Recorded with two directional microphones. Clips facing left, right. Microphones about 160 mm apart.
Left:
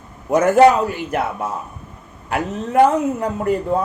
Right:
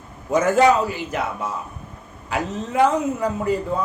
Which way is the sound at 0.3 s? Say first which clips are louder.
Left 4 dB; 60° left (ahead or behind).